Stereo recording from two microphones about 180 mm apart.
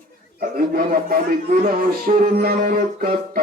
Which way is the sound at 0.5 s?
55° right (ahead or behind).